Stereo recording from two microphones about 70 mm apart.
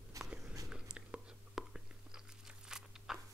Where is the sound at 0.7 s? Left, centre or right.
Centre.